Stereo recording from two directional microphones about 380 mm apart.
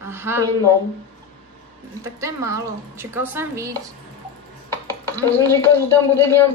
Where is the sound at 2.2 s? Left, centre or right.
Centre.